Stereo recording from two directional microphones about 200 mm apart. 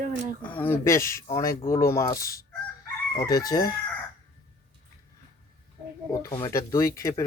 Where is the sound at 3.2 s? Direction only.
20° left (ahead or behind).